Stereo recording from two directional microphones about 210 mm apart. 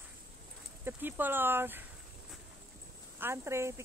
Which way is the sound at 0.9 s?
10° right (ahead or behind).